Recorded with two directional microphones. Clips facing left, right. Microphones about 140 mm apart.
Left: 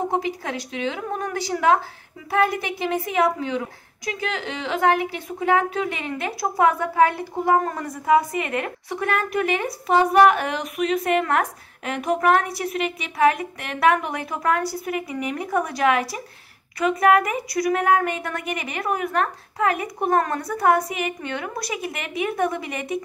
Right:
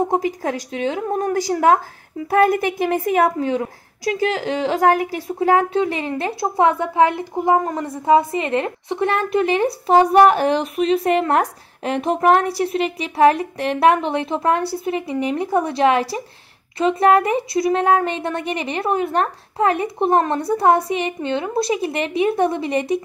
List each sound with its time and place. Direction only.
0.1 s a woman's voice: 40° right (ahead or behind)